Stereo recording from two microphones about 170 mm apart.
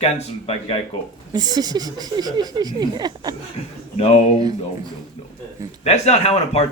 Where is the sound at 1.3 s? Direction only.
25° right (ahead or behind).